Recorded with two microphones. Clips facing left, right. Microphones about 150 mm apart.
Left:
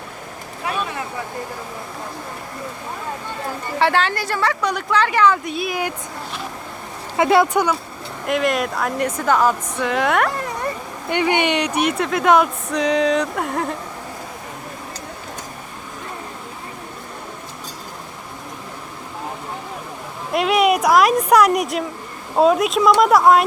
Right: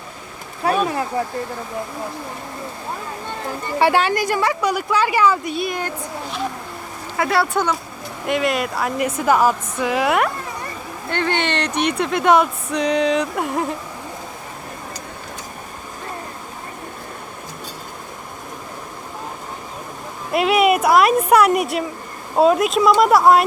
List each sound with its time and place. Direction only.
0.6 s a sound: 40° right (ahead or behind)
3.8 s speech: 10° right (ahead or behind); by 5.9 s 5° left (ahead or behind)
7.2 s speech: 20° left (ahead or behind)
8.3 s speech: centre (ahead or behind)
11.1 s speech: 15° left (ahead or behind); by 13.7 s 5° right (ahead or behind)
20.3 s speech: centre (ahead or behind)